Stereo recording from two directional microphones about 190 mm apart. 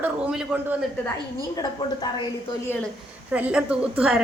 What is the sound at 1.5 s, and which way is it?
Speech, 25° left (ahead or behind).